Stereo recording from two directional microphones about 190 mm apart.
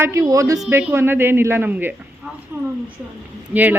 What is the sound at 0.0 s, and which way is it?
A woman's voice, 15° right (ahead or behind).